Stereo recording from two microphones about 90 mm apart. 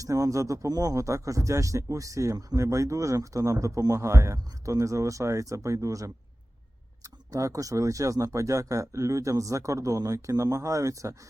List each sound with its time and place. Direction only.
0.0 s speech: 40° right (ahead or behind)
7.3 s speech: 40° right (ahead or behind)